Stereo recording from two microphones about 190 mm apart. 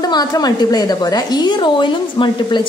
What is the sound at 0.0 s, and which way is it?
A woman's voice, 20° left (ahead or behind).